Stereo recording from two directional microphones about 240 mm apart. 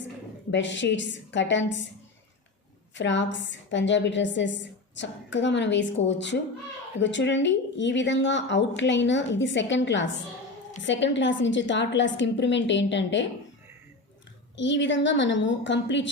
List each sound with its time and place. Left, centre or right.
0.5 s a woman's voice: left
2.9 s a woman's voice: left
14.5 s a woman's voice: left